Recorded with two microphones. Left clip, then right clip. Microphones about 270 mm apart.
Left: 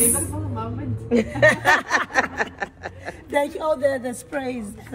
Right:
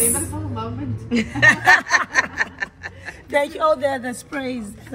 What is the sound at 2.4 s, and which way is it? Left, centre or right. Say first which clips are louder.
Snicker: right 2 dB; left.